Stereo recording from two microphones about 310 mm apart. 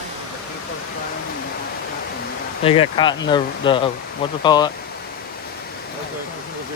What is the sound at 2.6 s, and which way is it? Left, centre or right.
Speech, centre.